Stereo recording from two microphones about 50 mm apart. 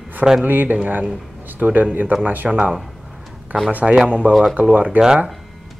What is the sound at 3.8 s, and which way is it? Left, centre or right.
Speech, centre.